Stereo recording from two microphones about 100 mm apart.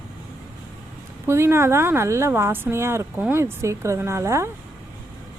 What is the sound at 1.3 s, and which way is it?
Speech, 25° right (ahead or behind).